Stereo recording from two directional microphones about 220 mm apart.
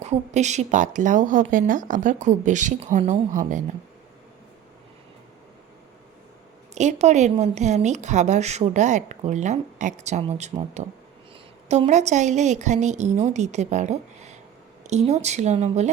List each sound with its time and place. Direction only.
0.0 s a woman's voice: 30° right (ahead or behind)
6.7 s a woman's voice: 30° right (ahead or behind)